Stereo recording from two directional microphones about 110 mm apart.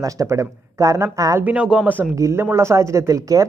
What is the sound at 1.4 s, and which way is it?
Speech, 10° right (ahead or behind).